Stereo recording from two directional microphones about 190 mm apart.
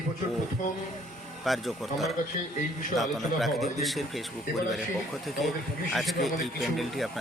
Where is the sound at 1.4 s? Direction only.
Centre (ahead or behind).